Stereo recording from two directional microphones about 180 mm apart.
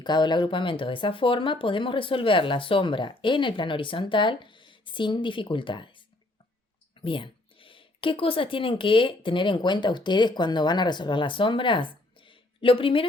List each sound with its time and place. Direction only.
0.0 s speech: 25° left (ahead or behind)
7.0 s speech: 30° left (ahead or behind)